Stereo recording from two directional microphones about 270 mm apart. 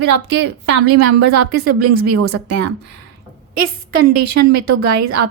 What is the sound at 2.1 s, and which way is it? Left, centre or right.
Speech, right.